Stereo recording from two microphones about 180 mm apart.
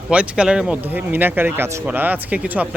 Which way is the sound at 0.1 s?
5° right (ahead or behind).